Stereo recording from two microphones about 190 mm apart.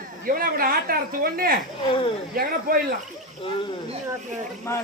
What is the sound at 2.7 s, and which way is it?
Speech, 50° right (ahead or behind).